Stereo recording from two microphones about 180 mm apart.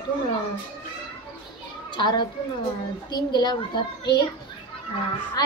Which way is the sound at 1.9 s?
25° left (ahead or behind).